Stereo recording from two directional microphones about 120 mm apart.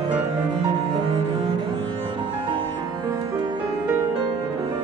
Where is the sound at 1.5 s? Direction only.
45° right (ahead or behind).